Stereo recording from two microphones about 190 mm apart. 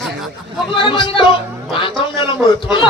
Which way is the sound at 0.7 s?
25° left (ahead or behind).